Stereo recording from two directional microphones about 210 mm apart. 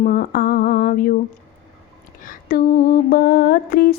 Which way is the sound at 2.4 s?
40° left (ahead or behind).